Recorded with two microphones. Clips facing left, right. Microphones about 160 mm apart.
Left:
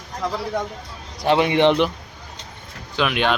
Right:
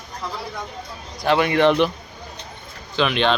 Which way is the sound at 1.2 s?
25° left (ahead or behind).